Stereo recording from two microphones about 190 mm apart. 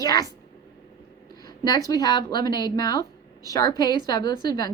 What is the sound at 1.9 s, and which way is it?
A woman's voice, 20° left (ahead or behind).